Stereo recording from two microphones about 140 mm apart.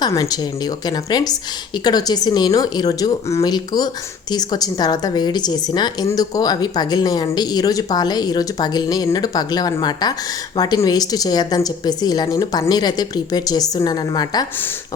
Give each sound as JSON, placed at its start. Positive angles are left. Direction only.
{"t": 0.0, "sound": "a woman's voice", "side_deg": 25}